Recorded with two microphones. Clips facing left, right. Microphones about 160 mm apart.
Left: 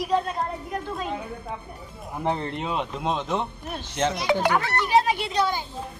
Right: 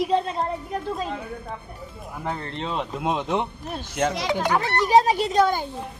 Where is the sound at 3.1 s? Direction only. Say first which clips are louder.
Right 3 dB; 15° right (ahead or behind).